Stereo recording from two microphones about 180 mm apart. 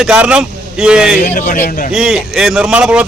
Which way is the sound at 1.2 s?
45° left (ahead or behind).